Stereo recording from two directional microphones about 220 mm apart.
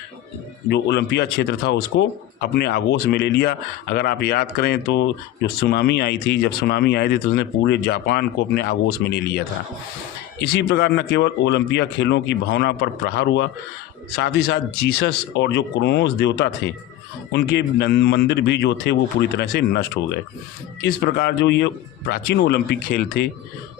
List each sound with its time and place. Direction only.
0.7 s speech: 50° left (ahead or behind)
10.4 s speech: 45° left (ahead or behind)